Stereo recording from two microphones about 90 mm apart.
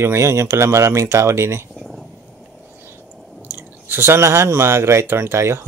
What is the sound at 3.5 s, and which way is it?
Speech, 25° right (ahead or behind).